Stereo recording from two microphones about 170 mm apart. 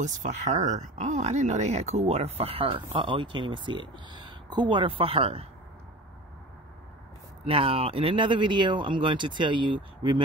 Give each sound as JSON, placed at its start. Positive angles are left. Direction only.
{"t": 0.0, "sound": "speech", "side_deg": -45}
{"t": 7.4, "sound": "speech", "side_deg": -35}